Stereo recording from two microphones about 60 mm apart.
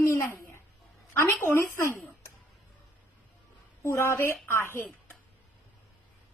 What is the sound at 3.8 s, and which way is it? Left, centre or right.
Speech, left.